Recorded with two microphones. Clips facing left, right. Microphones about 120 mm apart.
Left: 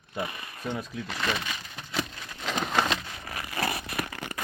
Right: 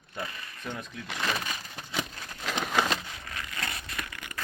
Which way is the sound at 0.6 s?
10° left (ahead or behind).